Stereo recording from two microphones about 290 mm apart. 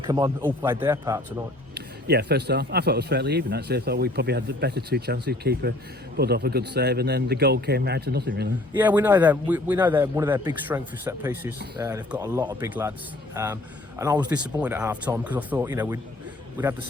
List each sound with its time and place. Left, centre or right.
0.0 s a man's voice: centre
1.7 s speech: right
8.7 s a man's voice: centre